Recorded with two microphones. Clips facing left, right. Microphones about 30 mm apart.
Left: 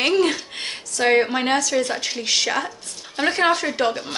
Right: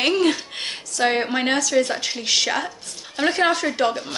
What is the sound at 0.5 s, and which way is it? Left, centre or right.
A woman's voice, centre.